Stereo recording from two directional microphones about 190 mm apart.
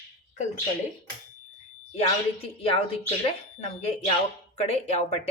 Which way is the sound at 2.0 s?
30° left (ahead or behind).